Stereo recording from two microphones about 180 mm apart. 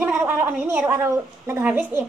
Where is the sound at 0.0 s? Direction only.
10° right (ahead or behind).